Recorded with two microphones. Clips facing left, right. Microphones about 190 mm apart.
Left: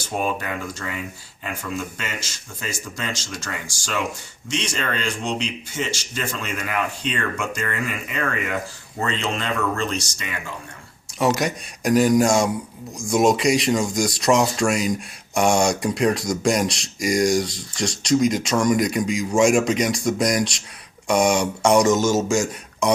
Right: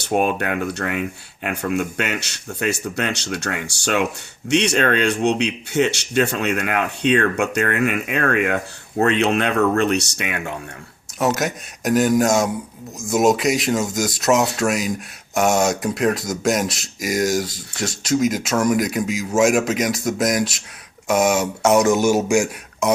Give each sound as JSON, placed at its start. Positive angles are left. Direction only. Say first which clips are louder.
{"t": 0.0, "sound": "speech", "louder": "right 6 dB", "side_deg": -65}
{"t": 11.2, "sound": "speech", "louder": "even", "side_deg": 0}
{"t": 22.8, "sound": "speech", "louder": "right 1 dB", "side_deg": -5}